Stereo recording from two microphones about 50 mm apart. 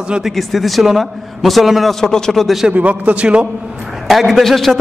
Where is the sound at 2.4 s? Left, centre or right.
Centre.